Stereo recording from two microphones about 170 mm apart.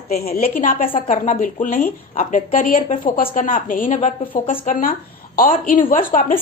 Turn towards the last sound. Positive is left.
turn(degrees=55)  # may be behind; listen again after turning